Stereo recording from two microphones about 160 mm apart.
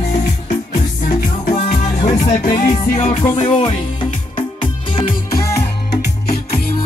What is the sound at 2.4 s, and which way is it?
Music, 25° left (ahead or behind).